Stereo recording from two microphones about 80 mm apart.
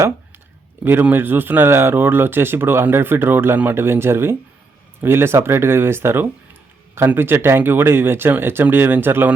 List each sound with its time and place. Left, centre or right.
1.1 s speech: right